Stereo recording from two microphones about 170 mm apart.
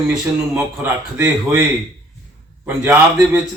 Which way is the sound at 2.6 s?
15° right (ahead or behind).